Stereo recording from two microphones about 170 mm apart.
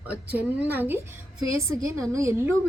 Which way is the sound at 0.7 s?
10° right (ahead or behind).